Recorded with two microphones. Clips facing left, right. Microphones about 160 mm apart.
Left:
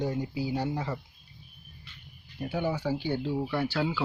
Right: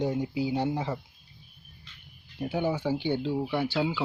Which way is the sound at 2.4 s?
20° right (ahead or behind).